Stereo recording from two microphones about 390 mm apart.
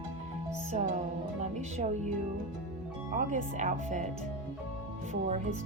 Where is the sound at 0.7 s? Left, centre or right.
Centre.